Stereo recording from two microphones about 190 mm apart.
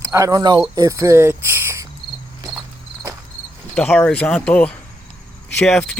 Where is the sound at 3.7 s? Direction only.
10° left (ahead or behind).